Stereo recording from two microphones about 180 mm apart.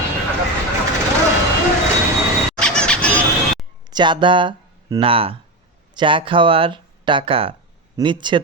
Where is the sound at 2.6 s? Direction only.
5° left (ahead or behind).